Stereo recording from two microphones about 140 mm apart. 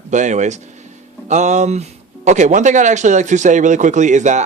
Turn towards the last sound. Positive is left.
turn(degrees=-60)  # may be behind; listen again after turning